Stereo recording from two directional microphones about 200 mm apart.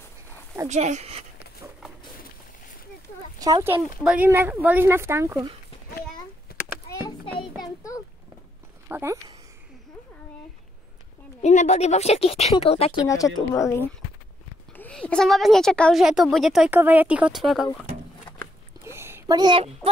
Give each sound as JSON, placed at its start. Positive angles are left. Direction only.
{"t": 0.7, "sound": "speech", "side_deg": -35}
{"t": 3.3, "sound": "speech", "side_deg": -20}
{"t": 6.1, "sound": "a sound", "side_deg": 15}
{"t": 8.8, "sound": "speech", "side_deg": -10}
{"t": 11.4, "sound": "speech", "side_deg": 35}
{"t": 13.0, "sound": "a woman's voice", "side_deg": 15}
{"t": 18.9, "sound": "a sound", "side_deg": -10}